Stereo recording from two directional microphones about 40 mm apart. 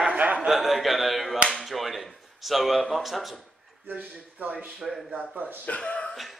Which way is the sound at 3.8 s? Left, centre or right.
Right.